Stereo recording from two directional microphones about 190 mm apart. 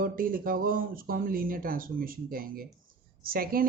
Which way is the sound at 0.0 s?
50° right (ahead or behind).